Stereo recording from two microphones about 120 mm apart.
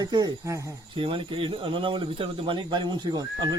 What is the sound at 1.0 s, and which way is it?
Speech, 45° right (ahead or behind).